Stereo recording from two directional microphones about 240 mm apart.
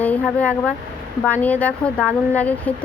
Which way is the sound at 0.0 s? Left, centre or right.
Centre.